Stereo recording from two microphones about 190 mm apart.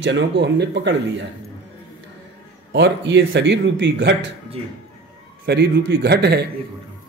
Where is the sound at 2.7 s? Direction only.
65° right (ahead or behind).